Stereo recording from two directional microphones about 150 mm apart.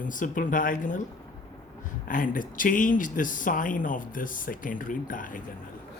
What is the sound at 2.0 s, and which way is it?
Speech, 60° left (ahead or behind).